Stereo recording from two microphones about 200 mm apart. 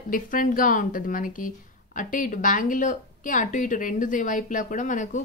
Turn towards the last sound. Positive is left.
turn(degrees=40)  # may be behind; listen again after turning